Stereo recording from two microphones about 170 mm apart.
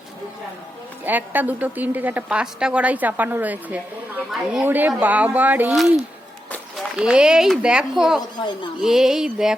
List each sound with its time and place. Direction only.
1.0 s a woman's voice: 10° right (ahead or behind)